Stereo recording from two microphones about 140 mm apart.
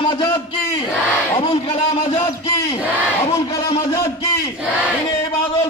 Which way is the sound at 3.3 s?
25° left (ahead or behind).